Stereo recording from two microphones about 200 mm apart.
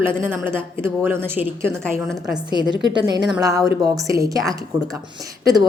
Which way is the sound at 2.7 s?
20° right (ahead or behind).